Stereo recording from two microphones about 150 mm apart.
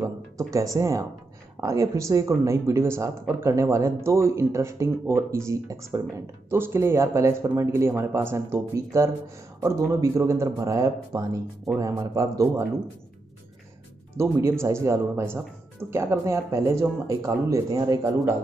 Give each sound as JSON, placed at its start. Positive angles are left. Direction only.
{"t": 0.0, "sound": "speech", "side_deg": -20}
{"t": 14.1, "sound": "speech", "side_deg": -20}